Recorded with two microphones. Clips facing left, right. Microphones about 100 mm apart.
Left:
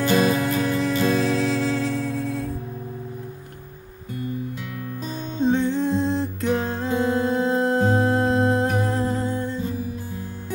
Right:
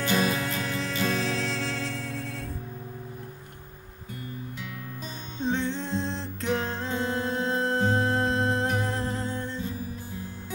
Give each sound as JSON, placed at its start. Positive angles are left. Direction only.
{"t": 0.0, "sound": "music", "side_deg": 45}
{"t": 0.4, "sound": "music", "side_deg": 10}
{"t": 5.4, "sound": "music", "side_deg": 10}
{"t": 8.8, "sound": "humming", "side_deg": 10}